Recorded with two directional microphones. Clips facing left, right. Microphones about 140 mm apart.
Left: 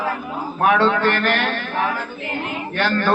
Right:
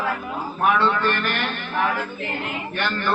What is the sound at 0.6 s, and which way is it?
A man's voice, 90° left.